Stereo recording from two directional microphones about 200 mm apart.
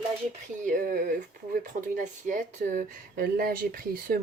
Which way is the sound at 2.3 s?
40° right (ahead or behind).